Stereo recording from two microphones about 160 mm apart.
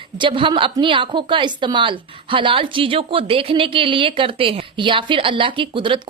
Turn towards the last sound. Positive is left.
turn(degrees=-30)  # may be behind; listen again after turning